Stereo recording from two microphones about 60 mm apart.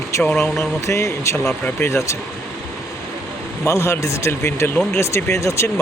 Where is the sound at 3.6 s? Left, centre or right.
Left.